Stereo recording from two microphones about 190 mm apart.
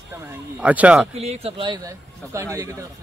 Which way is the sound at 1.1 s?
35° right (ahead or behind).